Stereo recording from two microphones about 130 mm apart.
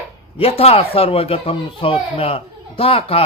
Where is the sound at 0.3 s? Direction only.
50° left (ahead or behind).